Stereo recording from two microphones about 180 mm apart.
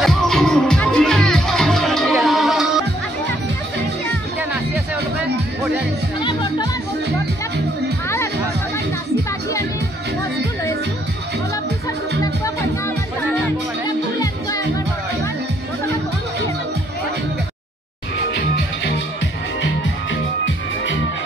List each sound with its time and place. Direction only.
0.0 s music: 5° left (ahead or behind)
6.2 s music: 25° left (ahead or behind)
13.8 s music: 20° left (ahead or behind)
20.4 s music: 90° left